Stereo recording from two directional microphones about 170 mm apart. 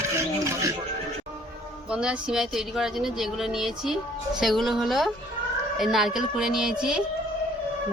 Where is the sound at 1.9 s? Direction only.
5° right (ahead or behind).